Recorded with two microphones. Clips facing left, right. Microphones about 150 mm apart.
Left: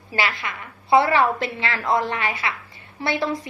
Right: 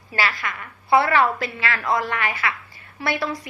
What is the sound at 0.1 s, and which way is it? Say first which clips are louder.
A woman's voice: even; 20° left (ahead or behind).